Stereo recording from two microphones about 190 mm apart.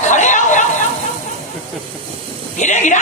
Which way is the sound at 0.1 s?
40° left (ahead or behind).